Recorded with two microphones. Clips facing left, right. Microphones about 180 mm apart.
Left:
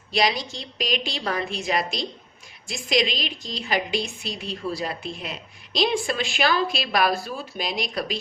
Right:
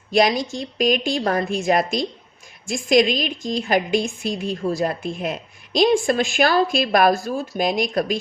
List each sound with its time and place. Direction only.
0.1 s a woman's voice: 50° right (ahead or behind)